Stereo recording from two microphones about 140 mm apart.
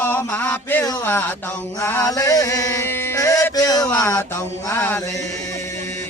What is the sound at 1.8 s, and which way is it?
Chant, 20° left (ahead or behind).